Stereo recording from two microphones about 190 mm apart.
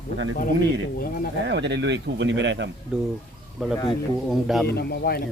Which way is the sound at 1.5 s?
65° right (ahead or behind).